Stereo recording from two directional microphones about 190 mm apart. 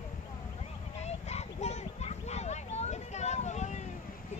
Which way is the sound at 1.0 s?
35° left (ahead or behind).